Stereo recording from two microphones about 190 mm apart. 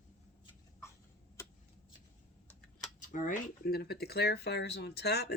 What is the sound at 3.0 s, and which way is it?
Speech, 45° left (ahead or behind).